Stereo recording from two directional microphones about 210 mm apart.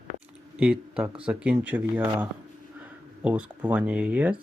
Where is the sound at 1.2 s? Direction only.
5° right (ahead or behind).